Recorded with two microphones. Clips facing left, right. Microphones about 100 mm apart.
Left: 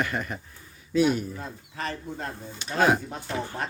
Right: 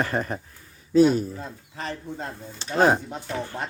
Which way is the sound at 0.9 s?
35° right (ahead or behind).